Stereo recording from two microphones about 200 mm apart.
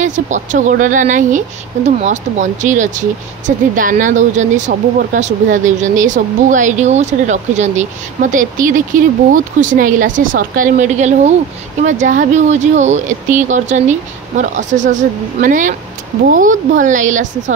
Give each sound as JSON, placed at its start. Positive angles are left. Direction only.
{"t": 0.0, "sound": "a woman's voice", "side_deg": -40}